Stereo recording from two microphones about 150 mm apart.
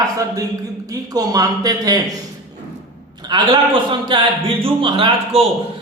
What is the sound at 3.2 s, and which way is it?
A man's voice, 30° right (ahead or behind).